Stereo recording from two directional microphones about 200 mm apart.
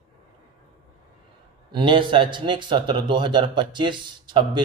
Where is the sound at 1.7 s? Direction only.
25° right (ahead or behind).